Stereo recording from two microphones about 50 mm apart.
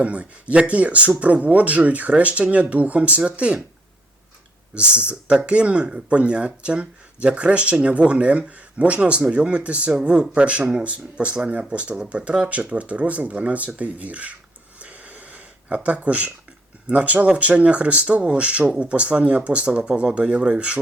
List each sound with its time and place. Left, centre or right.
0.0 s speech: right
4.7 s speech: right
14.8 s a sound: right
16.9 s speech: right